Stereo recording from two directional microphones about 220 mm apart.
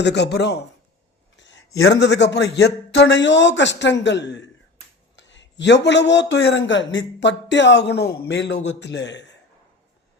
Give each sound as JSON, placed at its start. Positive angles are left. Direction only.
{"t": 0.0, "sound": "a man's voice", "side_deg": 50}
{"t": 1.4, "sound": "a sound", "side_deg": 55}
{"t": 1.9, "sound": "a man's voice", "side_deg": 50}